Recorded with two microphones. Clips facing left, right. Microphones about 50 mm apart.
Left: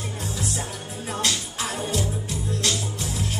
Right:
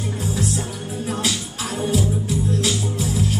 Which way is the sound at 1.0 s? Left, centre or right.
Centre.